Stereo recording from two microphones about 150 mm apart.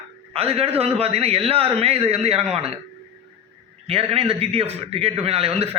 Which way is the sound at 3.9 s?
40° right (ahead or behind).